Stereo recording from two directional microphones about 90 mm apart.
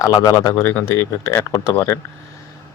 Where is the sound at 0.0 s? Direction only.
40° left (ahead or behind).